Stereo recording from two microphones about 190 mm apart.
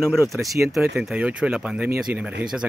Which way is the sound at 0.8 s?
5° right (ahead or behind).